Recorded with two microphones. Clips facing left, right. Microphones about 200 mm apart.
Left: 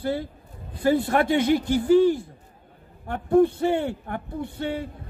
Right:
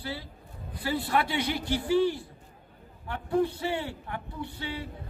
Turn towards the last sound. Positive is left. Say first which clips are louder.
# left 7 dB
turn(degrees=50)  # may be behind; listen again after turning